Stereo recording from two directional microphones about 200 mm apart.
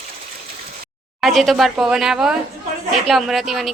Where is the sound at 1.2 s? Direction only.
Centre (ahead or behind).